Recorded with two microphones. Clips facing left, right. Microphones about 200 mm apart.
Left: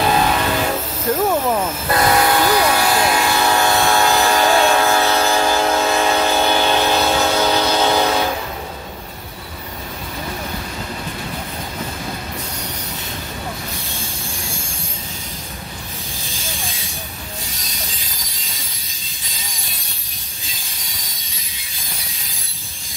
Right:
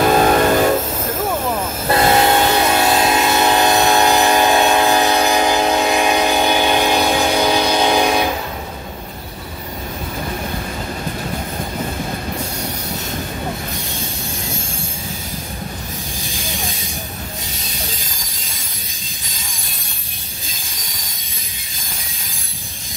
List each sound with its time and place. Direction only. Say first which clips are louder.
0.3 s train: right 6 dB; 45° right (ahead or behind)
1.9 s train: right 3 dB; 25° right (ahead or behind)